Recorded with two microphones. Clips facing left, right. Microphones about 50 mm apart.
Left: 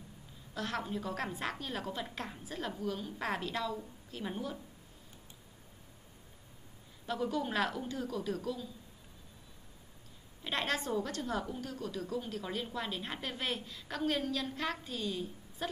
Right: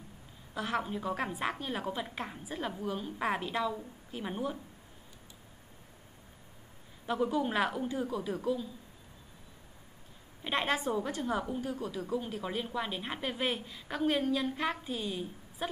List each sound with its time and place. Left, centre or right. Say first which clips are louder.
0.6 s a woman's voice: right 3 dB; centre
7.1 s a woman's voice: right 4 dB; centre
10.4 s a woman's voice: right 4 dB; centre